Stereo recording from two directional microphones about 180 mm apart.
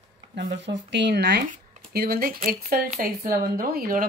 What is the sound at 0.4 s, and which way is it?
Speech, 75° right (ahead or behind).